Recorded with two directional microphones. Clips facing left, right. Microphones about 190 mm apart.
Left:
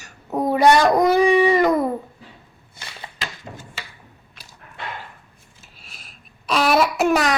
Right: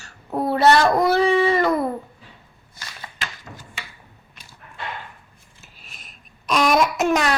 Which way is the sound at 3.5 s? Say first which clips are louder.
Left 3 dB; 25° left (ahead or behind).